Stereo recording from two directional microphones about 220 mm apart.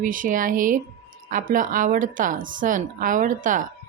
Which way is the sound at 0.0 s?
40° right (ahead or behind).